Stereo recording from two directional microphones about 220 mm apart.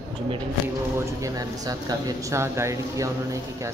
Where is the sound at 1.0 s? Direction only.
15° right (ahead or behind).